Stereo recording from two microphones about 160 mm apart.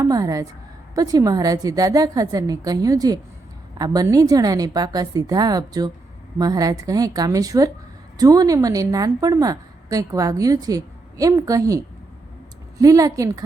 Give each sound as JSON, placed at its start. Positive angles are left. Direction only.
{"t": 0.0, "sound": "a woman's voice", "side_deg": -20}